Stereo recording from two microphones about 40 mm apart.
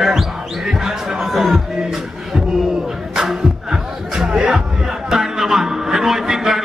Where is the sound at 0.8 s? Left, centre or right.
Centre.